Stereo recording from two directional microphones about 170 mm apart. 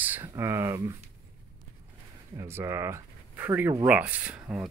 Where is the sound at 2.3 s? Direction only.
15° right (ahead or behind).